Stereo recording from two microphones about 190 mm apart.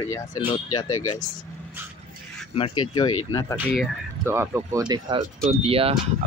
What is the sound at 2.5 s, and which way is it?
Speech, 25° left (ahead or behind).